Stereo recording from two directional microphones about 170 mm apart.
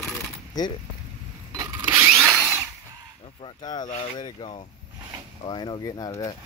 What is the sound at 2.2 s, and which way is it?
Drill, centre (ahead or behind).